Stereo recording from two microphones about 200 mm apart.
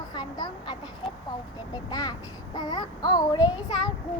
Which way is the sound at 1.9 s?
20° left (ahead or behind).